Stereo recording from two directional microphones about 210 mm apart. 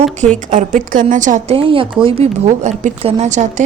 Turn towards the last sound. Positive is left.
turn(degrees=-35)  # may be behind; listen again after turning